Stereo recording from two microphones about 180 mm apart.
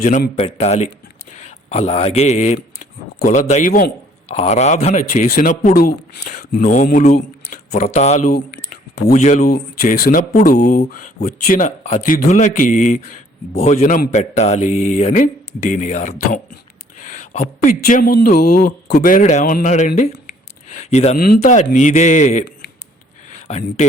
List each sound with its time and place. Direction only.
0.3 s a man's voice: 35° left (ahead or behind); by 3.9 s 50° left (ahead or behind)
4.4 s a man's voice: 40° left (ahead or behind); by 7.9 s 55° left (ahead or behind)
7.9 s a man's voice: 40° left (ahead or behind)
8.3 s speech: 55° left (ahead or behind); by 21.2 s 40° left (ahead or behind)
21.2 s speech: 55° left (ahead or behind); by 23.8 s 40° left (ahead or behind)